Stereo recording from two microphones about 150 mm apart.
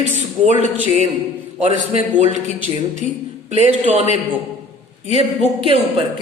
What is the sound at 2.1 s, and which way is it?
Speech, 55° right (ahead or behind).